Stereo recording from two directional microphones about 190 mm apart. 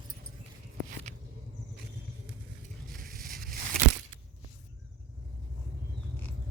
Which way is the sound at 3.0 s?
50° right (ahead or behind).